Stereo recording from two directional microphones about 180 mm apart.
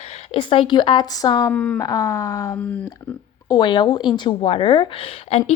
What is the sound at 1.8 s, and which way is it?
A woman's voice, 20° left (ahead or behind).